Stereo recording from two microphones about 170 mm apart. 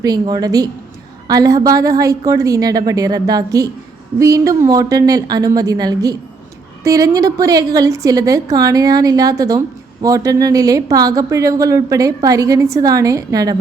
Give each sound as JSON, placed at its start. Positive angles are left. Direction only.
{"t": 0.0, "sound": "a woman's voice", "side_deg": -25}